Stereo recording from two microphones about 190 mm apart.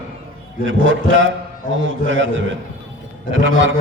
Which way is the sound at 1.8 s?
80° right.